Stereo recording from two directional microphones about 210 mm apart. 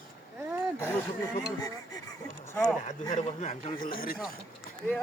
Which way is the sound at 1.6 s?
15° left (ahead or behind).